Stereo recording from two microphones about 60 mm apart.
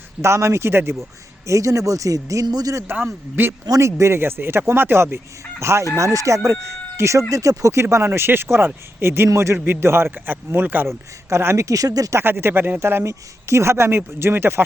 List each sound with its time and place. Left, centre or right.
0.2 s speech: right
1.5 s speech: right
2.8 s a man's voice: right
3.8 s a man's voice: right
10.8 s speech: right
12.2 s a man's voice: right
13.1 s speech: right